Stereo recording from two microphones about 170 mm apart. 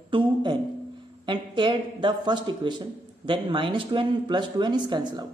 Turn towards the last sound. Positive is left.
turn(degrees=-25)  # may be behind; listen again after turning